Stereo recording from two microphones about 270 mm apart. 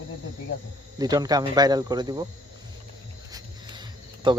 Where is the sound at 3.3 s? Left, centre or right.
Centre.